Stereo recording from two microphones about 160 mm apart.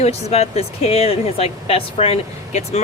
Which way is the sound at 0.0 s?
40° left (ahead or behind).